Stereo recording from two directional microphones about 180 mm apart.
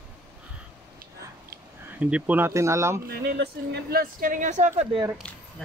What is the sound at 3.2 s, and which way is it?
Speech, 60° right (ahead or behind).